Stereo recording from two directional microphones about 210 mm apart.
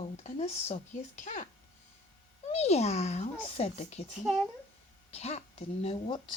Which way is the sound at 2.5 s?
30° left (ahead or behind).